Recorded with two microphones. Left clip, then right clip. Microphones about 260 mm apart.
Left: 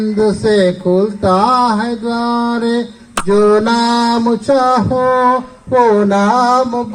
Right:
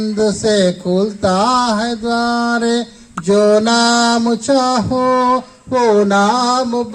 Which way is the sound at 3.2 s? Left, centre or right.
Right.